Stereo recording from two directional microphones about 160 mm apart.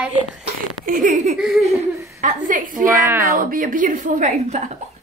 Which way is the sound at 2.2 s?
55° right (ahead or behind).